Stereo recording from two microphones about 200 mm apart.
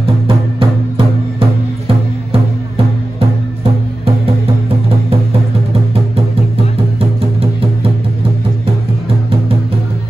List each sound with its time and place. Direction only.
0.3 s music: 25° right (ahead or behind)
7.0 s music: 25° right (ahead or behind)